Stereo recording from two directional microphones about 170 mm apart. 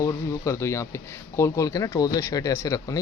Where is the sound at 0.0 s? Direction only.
20° left (ahead or behind).